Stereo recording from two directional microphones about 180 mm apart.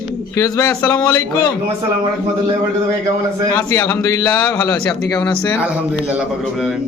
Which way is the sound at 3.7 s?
15° left (ahead or behind).